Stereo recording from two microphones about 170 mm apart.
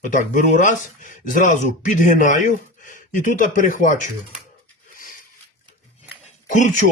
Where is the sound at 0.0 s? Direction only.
50° left (ahead or behind).